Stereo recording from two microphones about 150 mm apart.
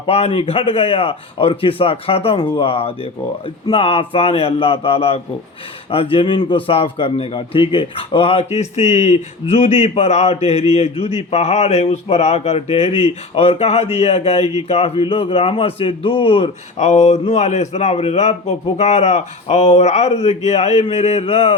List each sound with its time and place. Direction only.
0.0 s a man's voice: 40° left (ahead or behind)